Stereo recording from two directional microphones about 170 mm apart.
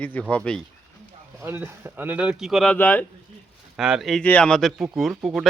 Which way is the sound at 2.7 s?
10° left (ahead or behind).